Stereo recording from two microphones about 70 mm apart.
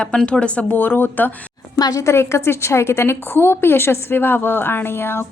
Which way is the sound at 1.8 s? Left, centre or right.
Left.